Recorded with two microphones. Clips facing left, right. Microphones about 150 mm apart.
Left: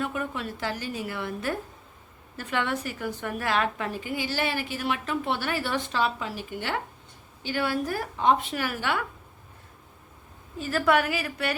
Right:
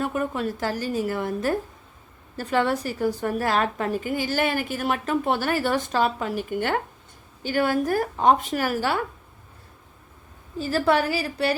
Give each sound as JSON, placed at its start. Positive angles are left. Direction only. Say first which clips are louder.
{"t": 0.0, "sound": "a woman's voice", "louder": "right 5 dB", "side_deg": -40}
{"t": 10.6, "sound": "a woman's voice", "louder": "right 2 dB", "side_deg": -30}